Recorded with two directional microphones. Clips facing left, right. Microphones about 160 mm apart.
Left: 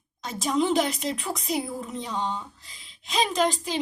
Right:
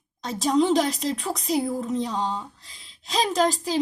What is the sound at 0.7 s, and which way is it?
A woman's voice, centre (ahead or behind).